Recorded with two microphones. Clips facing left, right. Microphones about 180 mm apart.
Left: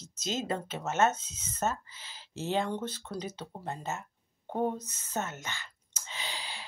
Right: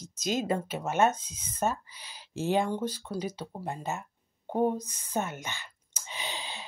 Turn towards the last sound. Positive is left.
turn(degrees=-20)  # may be behind; listen again after turning